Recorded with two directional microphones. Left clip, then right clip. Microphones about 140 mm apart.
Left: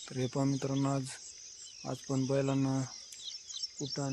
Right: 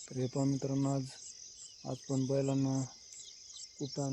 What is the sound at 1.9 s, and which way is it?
Cricket, 35° left (ahead or behind).